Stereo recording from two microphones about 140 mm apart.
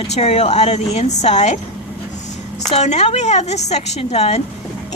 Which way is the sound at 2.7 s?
50° left (ahead or behind).